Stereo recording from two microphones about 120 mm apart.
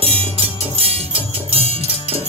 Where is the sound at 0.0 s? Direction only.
55° right (ahead or behind).